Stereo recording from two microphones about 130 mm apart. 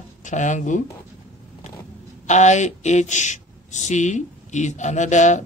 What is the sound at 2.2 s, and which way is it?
Speech, 65° left (ahead or behind).